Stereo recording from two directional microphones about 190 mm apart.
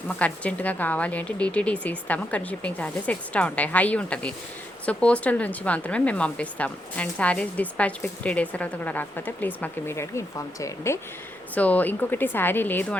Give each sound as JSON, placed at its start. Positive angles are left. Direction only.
{"t": 0.2, "sound": "speech", "side_deg": 5}